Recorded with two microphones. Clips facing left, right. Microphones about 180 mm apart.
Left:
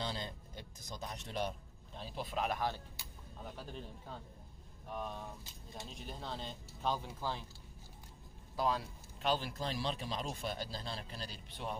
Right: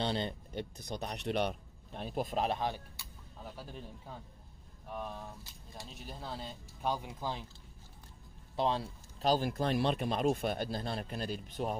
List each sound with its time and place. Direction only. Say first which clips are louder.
0.0 s speech: right 7 dB; 65° right (ahead or behind); by 2.4 s 45° right (ahead or behind)
2.4 s speech: even; 25° right (ahead or behind)
3.5 s speech: right 1 dB; 10° right (ahead or behind)
8.5 s speech: right 3 dB; 25° right (ahead or behind)
9.3 s speech: right 6 dB; 50° right (ahead or behind)